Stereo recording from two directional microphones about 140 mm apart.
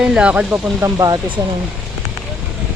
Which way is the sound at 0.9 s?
25° right (ahead or behind).